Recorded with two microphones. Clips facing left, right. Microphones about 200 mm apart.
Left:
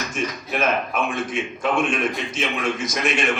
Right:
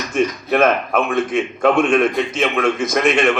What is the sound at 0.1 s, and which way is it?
A man's voice, 55° right (ahead or behind).